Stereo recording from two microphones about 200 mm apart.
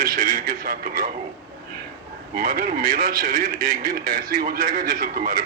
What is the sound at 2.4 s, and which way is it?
Speech, 45° right (ahead or behind).